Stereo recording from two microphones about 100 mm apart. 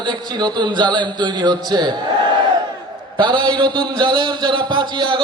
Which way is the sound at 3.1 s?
55° right (ahead or behind).